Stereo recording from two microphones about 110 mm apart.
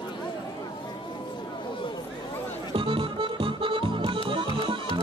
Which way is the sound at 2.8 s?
50° right (ahead or behind).